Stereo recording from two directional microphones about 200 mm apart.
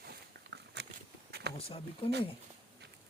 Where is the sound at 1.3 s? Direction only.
55° right (ahead or behind).